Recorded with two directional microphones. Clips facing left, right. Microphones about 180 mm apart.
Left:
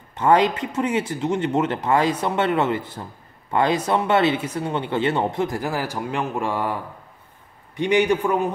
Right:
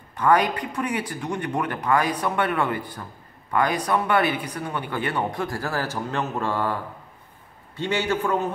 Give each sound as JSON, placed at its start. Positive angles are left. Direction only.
{"t": 0.1, "sound": "a man's voice", "side_deg": 25}